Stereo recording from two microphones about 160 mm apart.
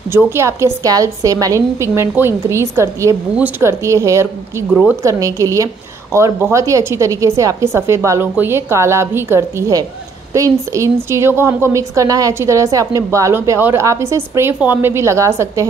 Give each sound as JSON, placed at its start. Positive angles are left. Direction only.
{"t": 0.1, "sound": "a woman's voice", "side_deg": -15}